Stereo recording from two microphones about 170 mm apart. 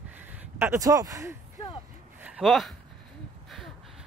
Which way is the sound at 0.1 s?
10° right (ahead or behind).